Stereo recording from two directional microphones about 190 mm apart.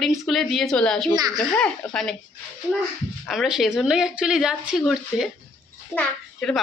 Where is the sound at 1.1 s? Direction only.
20° right (ahead or behind).